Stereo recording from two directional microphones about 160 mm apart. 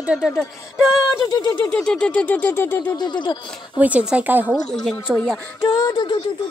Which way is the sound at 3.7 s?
10° right (ahead or behind).